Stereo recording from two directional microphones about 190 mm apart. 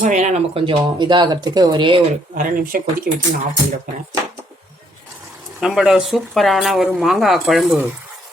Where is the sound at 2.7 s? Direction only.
50° right (ahead or behind).